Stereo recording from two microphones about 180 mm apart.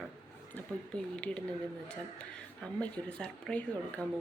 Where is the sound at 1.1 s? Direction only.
5° left (ahead or behind).